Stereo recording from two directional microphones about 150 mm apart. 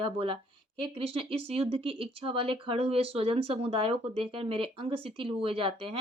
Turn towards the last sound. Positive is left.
turn(degrees=-35)  # may be behind; listen again after turning